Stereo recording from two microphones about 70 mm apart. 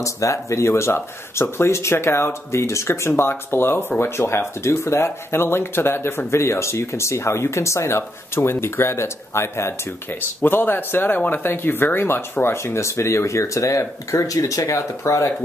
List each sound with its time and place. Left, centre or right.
0.0 s speech: left